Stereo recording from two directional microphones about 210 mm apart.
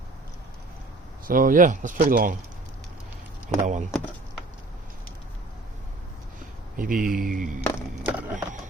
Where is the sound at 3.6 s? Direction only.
35° right (ahead or behind).